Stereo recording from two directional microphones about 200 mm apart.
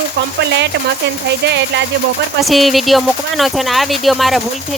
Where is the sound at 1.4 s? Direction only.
60° right (ahead or behind).